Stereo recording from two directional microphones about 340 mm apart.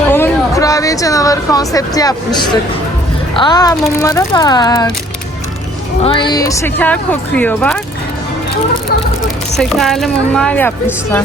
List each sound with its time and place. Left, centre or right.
0.1 s a sound: centre
3.3 s speech: centre
6.1 s speech: centre
9.6 s speech: centre